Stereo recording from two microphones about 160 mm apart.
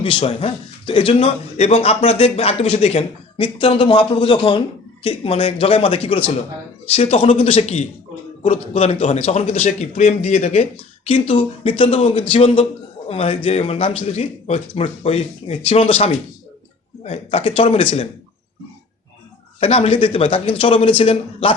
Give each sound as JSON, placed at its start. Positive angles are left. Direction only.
{"t": 0.0, "sound": "a man's voice", "side_deg": 35}
{"t": 19.5, "sound": "a man's voice", "side_deg": 40}